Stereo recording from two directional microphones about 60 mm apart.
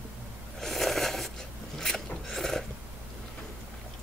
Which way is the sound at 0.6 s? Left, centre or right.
Centre.